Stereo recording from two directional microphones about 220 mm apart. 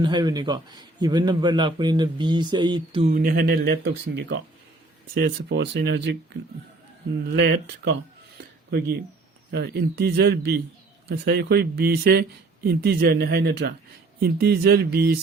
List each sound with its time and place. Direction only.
0.0 s a man's voice: 20° right (ahead or behind)
3.1 s speech: 40° right (ahead or behind)
9.5 s speech: 45° right (ahead or behind)